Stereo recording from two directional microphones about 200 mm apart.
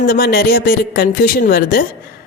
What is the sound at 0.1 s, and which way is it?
Speech, 50° left (ahead or behind).